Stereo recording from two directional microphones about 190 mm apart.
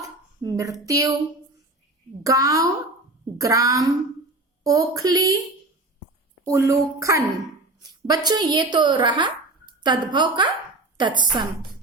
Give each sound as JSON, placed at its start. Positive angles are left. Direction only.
{"t": 0.4, "sound": "speech", "side_deg": -15}
{"t": 2.2, "sound": "speech", "side_deg": -15}
{"t": 6.4, "sound": "speech", "side_deg": -15}